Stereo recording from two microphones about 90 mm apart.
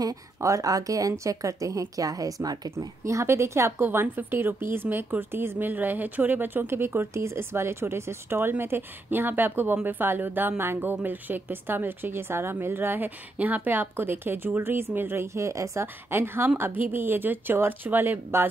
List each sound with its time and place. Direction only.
0.0 s a woman's voice: 40° right (ahead or behind); by 18.5 s 25° right (ahead or behind)